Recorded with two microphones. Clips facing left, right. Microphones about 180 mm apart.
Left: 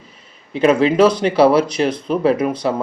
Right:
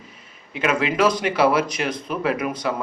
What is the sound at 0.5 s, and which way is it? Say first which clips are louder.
Speech: left 8 dB; 30° left (ahead or behind).